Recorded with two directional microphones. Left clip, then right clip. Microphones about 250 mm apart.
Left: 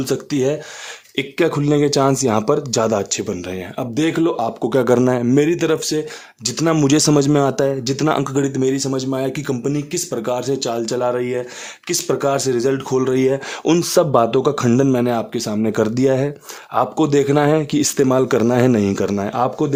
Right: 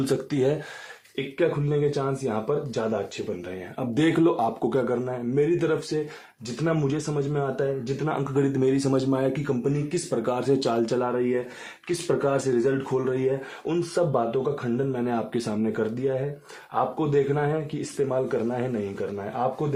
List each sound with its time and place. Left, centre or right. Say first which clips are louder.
0.0 s speech: left 5 dB; centre
1.1 s speech: left 7 dB; left
3.8 s speech: left 4 dB; left
8.3 s speech: left 5 dB; left
11.0 s speech: left 6 dB; left